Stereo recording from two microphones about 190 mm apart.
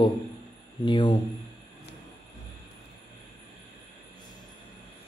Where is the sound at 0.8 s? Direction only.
25° left (ahead or behind).